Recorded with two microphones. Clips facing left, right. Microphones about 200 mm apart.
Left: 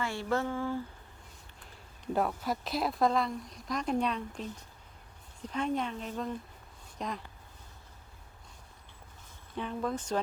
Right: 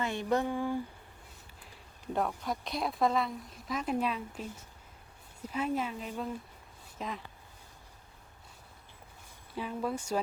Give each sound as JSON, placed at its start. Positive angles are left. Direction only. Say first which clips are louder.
{"t": 0.0, "sound": "speech", "louder": "right 1 dB", "side_deg": -20}
{"t": 2.1, "sound": "speech", "louder": "left 2 dB", "side_deg": 5}
{"t": 9.6, "sound": "speech", "louder": "left 1 dB", "side_deg": -5}